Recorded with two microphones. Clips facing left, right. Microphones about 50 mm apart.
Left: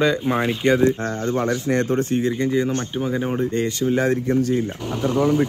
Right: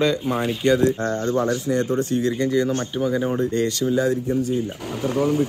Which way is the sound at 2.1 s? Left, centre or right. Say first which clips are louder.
Right 2 dB; left.